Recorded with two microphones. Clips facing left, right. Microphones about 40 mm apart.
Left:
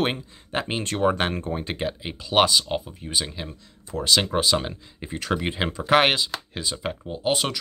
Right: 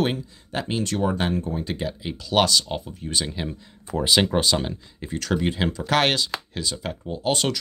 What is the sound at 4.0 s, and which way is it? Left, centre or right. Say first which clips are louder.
Speech: right 2 dB; centre.